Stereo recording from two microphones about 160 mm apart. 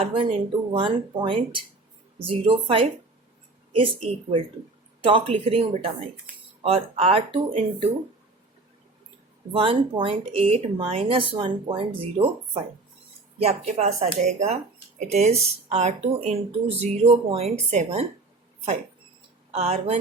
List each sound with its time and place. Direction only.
0.0 s speech: 30° right (ahead or behind)
9.5 s speech: 35° right (ahead or behind)
13.4 s speech: 40° right (ahead or behind)
19.5 s speech: 40° right (ahead or behind)